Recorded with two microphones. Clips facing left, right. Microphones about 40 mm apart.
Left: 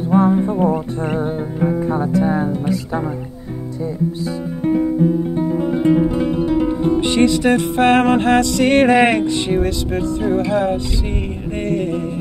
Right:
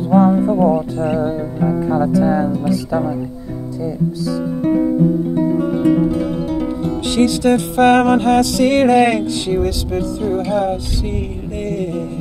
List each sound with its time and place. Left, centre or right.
0.5 s music: left
0.9 s music: left
1.9 s speech: left
5.5 s music: left